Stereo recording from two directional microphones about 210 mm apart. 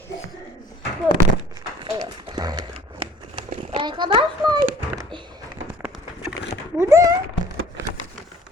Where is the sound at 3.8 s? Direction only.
20° right (ahead or behind).